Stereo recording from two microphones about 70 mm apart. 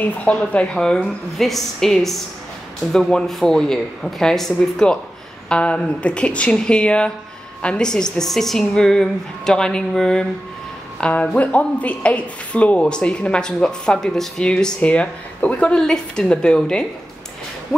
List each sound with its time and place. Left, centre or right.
0.0 s a woman's voice: left
5.5 s speech: centre